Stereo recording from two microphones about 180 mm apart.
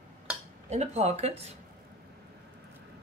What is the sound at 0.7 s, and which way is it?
Speech, 40° right (ahead or behind).